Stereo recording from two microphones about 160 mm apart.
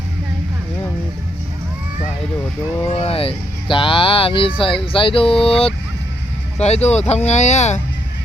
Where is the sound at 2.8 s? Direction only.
35° left (ahead or behind).